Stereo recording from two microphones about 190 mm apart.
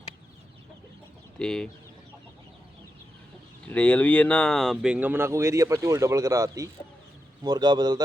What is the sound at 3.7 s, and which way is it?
A man's voice, 5° left (ahead or behind).